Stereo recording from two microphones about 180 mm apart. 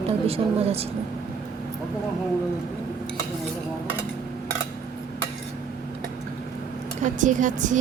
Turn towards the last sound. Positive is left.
turn(degrees=-45)  # may be behind; listen again after turning